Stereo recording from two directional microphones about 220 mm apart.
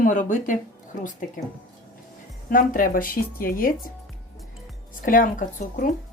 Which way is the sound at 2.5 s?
40° left (ahead or behind).